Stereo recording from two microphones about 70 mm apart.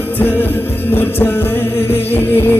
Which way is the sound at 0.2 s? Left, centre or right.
Left.